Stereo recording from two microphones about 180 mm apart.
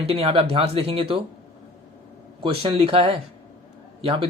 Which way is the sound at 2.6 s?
30° right (ahead or behind).